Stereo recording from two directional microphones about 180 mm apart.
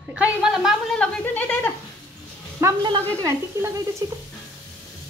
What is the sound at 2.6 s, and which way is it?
Speech, 25° right (ahead or behind).